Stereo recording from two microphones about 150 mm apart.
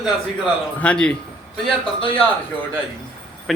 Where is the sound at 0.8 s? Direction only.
5° left (ahead or behind).